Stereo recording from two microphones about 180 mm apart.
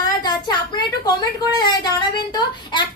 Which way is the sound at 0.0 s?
20° left (ahead or behind).